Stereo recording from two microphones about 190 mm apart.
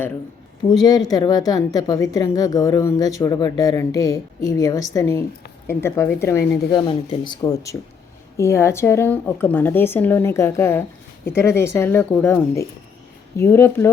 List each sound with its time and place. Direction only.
0.7 s a woman's voice: 20° left (ahead or behind)